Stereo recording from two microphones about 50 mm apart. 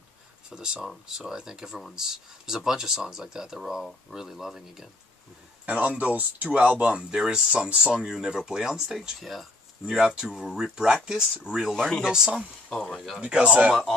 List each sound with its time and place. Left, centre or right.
0.5 s speech: centre
5.7 s speech: right; by 9.5 s centre
9.8 s speech: centre
11.7 s speech: centre
12.0 s speech: centre
12.9 s speech: centre
13.2 s speech: right